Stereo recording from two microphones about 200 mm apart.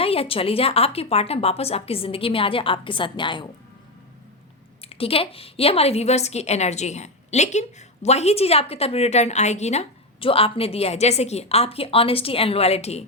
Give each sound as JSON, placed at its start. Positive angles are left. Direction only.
{"t": 0.0, "sound": "speech", "side_deg": 30}
{"t": 4.8, "sound": "a woman's voice", "side_deg": 30}